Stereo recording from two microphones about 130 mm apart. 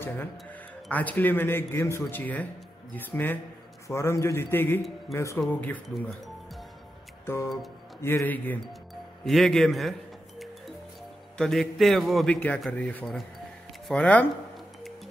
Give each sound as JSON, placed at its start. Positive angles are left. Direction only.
{"t": 0.8, "sound": "a man's voice", "side_deg": 10}
{"t": 5.9, "sound": "music", "side_deg": 0}
{"t": 8.0, "sound": "speech", "side_deg": 20}
{"t": 9.2, "sound": "a man's voice", "side_deg": 0}
{"t": 11.3, "sound": "a man's voice", "side_deg": 5}